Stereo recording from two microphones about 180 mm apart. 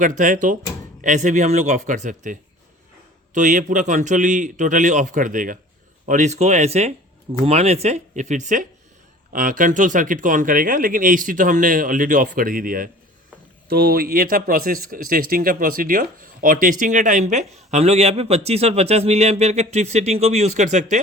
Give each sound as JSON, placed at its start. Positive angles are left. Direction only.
{"t": 0.0, "sound": "speech", "side_deg": -45}